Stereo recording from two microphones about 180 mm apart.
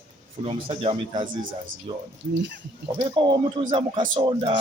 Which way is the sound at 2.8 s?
25° right (ahead or behind).